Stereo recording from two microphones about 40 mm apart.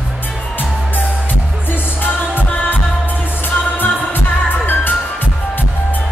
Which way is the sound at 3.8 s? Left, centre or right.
Left.